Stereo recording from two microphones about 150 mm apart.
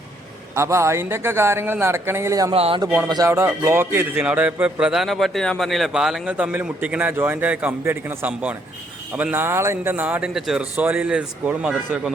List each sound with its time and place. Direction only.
0.5 s a man's voice: 20° right (ahead or behind)
2.5 s speech: 40° right (ahead or behind)
3.1 s a man's voice: 20° right (ahead or behind)